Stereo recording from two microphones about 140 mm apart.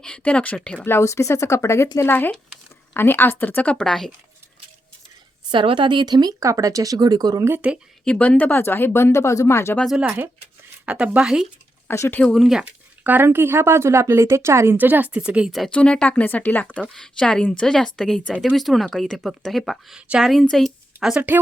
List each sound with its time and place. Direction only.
0.0 s speech: 5° left (ahead or behind)
0.9 s speech: 20° left (ahead or behind)
5.5 s speech: 35° right (ahead or behind); by 7.8 s 10° right (ahead or behind)
8.0 s speech: 5° left (ahead or behind)
9.7 s speech: centre (ahead or behind)
11.9 s speech: 15° left (ahead or behind)
12.3 s speech: centre (ahead or behind)